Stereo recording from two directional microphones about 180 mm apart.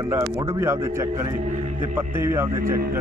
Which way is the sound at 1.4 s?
45° right (ahead or behind).